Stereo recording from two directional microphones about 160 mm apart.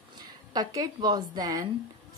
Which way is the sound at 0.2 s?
25° right (ahead or behind).